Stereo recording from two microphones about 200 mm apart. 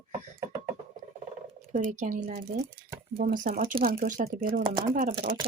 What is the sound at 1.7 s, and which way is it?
Speech, 40° right (ahead or behind).